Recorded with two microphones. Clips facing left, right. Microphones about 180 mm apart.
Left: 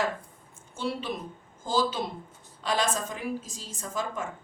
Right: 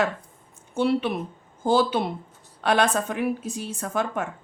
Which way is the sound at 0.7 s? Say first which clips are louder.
Right 9 dB; 65° right (ahead or behind).